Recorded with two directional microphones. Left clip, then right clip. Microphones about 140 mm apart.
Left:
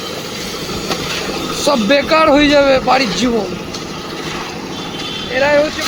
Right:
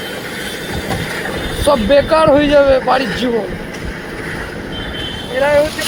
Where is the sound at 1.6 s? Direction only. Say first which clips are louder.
Right 2 dB; 20° left (ahead or behind).